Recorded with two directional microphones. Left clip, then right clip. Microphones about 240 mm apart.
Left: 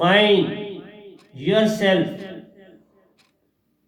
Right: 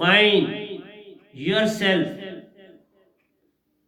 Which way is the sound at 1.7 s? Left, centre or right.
Right.